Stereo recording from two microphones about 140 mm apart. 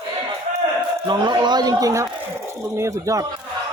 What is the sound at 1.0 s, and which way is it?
A man's voice, 30° right (ahead or behind).